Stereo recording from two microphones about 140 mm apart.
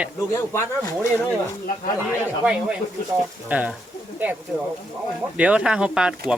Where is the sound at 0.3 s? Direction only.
20° left (ahead or behind).